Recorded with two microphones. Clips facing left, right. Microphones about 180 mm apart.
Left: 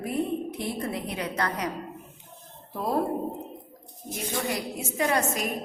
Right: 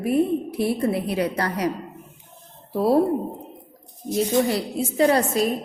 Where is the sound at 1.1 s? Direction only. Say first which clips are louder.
Right 6 dB; 30° right (ahead or behind).